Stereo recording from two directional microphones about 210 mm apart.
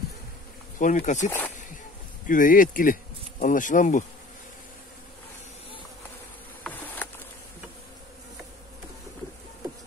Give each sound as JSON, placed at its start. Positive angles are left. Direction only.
{"t": 0.7, "sound": "speech", "side_deg": 35}
{"t": 1.2, "sound": "speech", "side_deg": 10}
{"t": 2.2, "sound": "bee", "side_deg": 40}
{"t": 6.6, "sound": "insect", "side_deg": 10}